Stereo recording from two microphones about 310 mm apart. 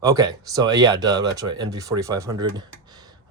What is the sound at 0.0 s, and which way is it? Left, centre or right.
Speech, centre.